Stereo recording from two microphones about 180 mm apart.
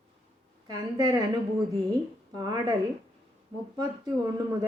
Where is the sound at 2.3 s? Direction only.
20° right (ahead or behind).